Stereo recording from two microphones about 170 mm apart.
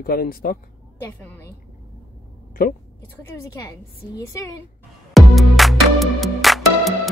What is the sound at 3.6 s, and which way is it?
Speech, 20° left (ahead or behind).